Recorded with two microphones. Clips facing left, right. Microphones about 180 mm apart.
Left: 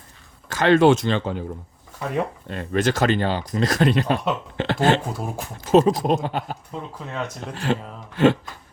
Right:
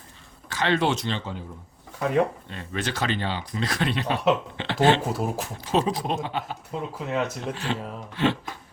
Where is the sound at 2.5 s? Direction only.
50° left (ahead or behind).